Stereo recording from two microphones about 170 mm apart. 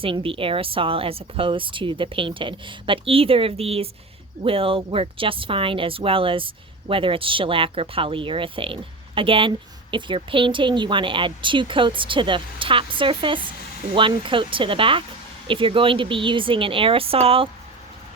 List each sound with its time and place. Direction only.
0.0 s speech: 30° right (ahead or behind)